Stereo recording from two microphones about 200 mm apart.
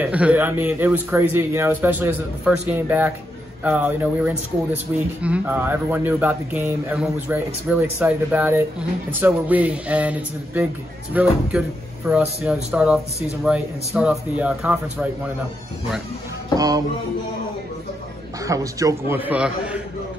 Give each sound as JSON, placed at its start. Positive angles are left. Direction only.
{"t": 0.0, "sound": "speech", "side_deg": -5}
{"t": 16.5, "sound": "music", "side_deg": -20}
{"t": 18.4, "sound": "speech", "side_deg": -15}